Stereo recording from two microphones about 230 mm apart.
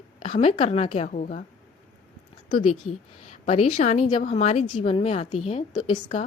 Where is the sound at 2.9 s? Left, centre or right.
Left.